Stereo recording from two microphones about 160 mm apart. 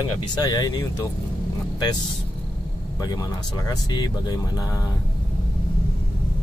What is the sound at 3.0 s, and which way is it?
Speech, 25° left (ahead or behind).